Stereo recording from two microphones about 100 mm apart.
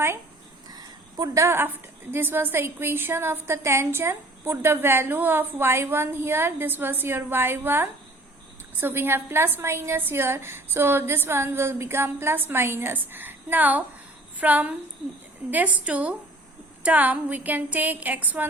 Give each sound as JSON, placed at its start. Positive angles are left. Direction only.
{"t": 0.7, "sound": "a woman's voice", "side_deg": -40}